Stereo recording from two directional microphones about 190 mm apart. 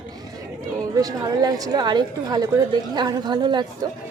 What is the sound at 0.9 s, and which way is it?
A woman's voice, 20° right (ahead or behind).